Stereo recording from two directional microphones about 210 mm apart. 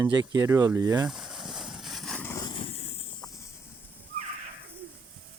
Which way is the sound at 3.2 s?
15° left (ahead or behind).